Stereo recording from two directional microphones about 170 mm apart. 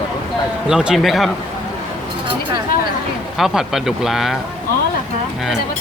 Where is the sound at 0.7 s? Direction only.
5° right (ahead or behind).